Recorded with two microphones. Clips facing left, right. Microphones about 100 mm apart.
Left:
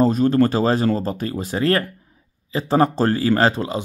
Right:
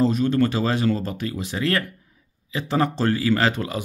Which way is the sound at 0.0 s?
40° left (ahead or behind).